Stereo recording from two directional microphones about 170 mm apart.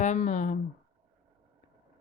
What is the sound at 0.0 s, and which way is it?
Speech, 45° left (ahead or behind).